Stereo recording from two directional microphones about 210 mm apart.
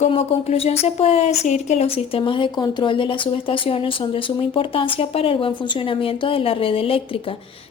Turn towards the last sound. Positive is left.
turn(degrees=25)  # may be behind; listen again after turning